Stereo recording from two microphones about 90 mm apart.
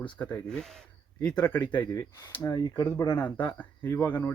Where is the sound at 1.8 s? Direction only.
40° left (ahead or behind).